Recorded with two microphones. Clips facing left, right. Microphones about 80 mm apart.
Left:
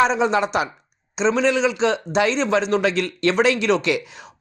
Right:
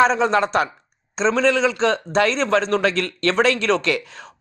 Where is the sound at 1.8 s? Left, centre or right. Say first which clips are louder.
Right 1 dB; right.